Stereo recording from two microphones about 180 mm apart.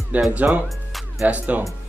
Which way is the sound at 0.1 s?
10° right (ahead or behind).